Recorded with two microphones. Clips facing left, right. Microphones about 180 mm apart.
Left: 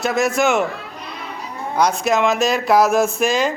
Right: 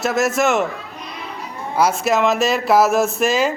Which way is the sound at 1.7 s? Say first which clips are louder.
Even; 5° right (ahead or behind).